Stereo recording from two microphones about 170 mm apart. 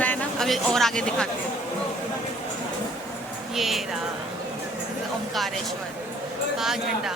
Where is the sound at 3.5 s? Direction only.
Centre (ahead or behind).